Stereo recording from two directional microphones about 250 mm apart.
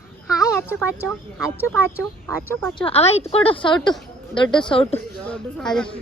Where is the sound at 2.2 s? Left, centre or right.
Centre.